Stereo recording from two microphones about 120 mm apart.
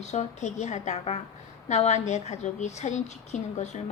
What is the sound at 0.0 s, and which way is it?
A woman's voice, 70° left (ahead or behind).